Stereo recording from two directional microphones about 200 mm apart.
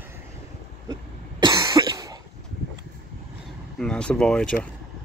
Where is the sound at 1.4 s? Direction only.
20° right (ahead or behind).